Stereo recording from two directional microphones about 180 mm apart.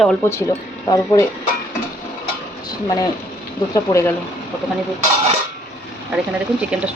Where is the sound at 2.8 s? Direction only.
20° left (ahead or behind).